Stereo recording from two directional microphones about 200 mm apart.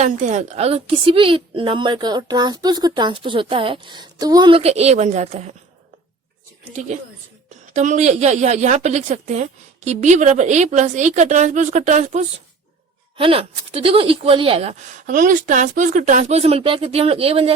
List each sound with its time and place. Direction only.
0.0 s a woman's voice: 35° right (ahead or behind)
6.7 s a woman's voice: 35° right (ahead or behind)